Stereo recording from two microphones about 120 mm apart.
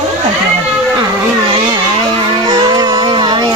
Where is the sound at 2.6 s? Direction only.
35° right (ahead or behind).